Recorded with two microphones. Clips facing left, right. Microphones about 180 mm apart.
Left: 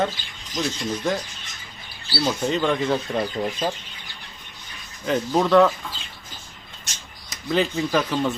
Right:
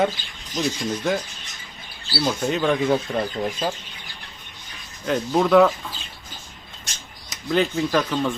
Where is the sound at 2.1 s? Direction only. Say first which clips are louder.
Even; 5° right (ahead or behind).